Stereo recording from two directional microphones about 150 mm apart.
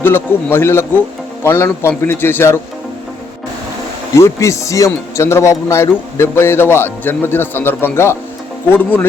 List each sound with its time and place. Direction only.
0.0 s speech: 15° left (ahead or behind)
4.1 s speech: 20° left (ahead or behind)